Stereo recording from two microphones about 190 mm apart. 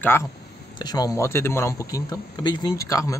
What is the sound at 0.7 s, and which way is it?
Speech, 20° left (ahead or behind).